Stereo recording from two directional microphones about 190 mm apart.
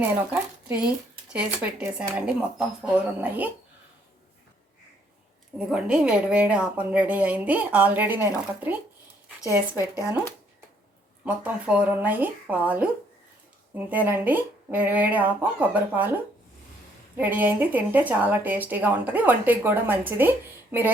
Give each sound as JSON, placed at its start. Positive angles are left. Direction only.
{"t": 0.8, "sound": "speech", "side_deg": -5}
{"t": 5.5, "sound": "speech", "side_deg": -5}
{"t": 10.0, "sound": "speech", "side_deg": 15}
{"t": 11.3, "sound": "speech", "side_deg": -5}